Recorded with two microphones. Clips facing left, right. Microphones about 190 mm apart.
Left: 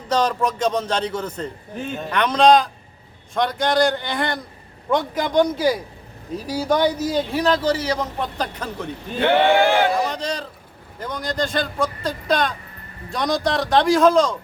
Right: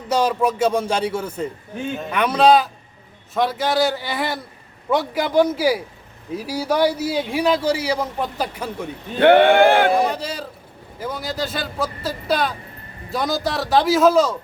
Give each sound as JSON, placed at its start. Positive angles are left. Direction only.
{"t": 0.1, "sound": "a man's voice", "side_deg": -10}
{"t": 9.2, "sound": "speech", "side_deg": -55}
{"t": 9.9, "sound": "a man's voice", "side_deg": -10}